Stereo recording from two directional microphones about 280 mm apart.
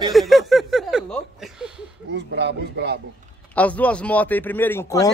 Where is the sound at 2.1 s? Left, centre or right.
Right.